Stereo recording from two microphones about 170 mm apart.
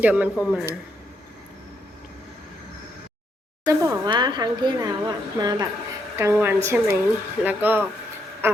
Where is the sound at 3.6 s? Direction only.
20° right (ahead or behind).